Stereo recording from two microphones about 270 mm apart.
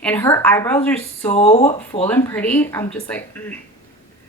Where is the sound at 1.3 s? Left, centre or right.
Left.